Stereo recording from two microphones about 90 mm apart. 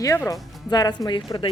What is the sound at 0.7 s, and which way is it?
Speech, 50° left (ahead or behind).